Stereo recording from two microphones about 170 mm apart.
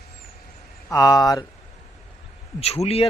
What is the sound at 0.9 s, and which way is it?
Speech, 20° left (ahead or behind).